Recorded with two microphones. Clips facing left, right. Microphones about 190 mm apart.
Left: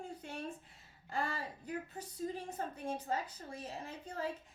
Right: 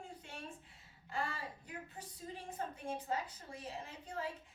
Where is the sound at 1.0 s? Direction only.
40° left (ahead or behind).